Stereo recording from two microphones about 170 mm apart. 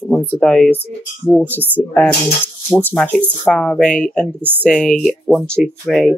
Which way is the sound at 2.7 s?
10° left (ahead or behind).